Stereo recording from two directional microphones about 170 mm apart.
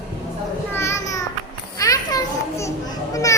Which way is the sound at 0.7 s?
15° left (ahead or behind).